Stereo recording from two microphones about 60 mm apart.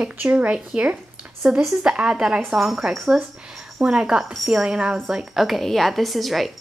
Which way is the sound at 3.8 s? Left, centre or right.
Centre.